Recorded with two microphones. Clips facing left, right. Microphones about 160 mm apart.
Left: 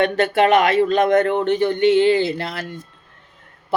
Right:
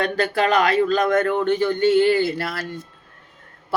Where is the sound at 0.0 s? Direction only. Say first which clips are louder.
Left 4 dB; 25° left (ahead or behind).